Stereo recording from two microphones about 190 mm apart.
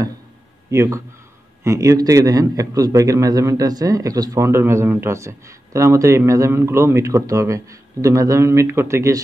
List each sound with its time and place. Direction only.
0.7 s a man's voice: 15° right (ahead or behind)